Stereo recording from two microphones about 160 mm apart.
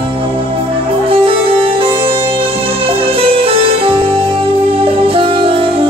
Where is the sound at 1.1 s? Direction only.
35° right (ahead or behind).